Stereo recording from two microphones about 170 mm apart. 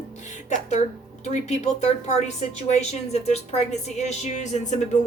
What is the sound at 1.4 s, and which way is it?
A woman's voice, 40° left (ahead or behind).